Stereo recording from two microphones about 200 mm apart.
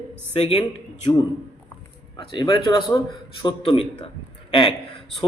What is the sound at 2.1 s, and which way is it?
Speech, 20° left (ahead or behind).